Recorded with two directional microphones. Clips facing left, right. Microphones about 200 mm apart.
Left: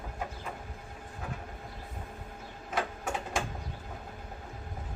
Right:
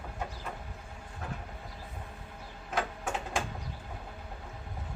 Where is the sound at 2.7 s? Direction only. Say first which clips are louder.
Even; centre (ahead or behind).